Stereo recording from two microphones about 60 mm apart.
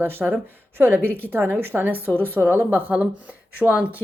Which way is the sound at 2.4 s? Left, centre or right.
Right.